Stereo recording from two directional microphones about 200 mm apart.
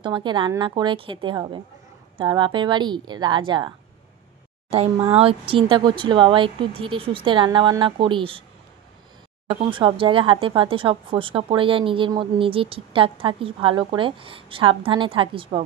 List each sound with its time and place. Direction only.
0.0 s speech: 25° right (ahead or behind)
9.7 s speech: 25° right (ahead or behind)